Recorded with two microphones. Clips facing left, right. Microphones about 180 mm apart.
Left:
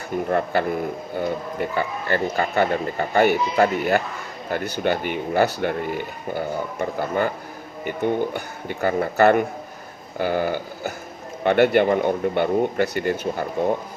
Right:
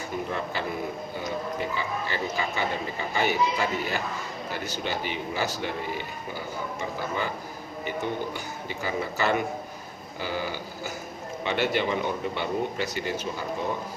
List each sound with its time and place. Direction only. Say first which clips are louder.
0.3 s speech: left 9 dB; 55° left (ahead or behind)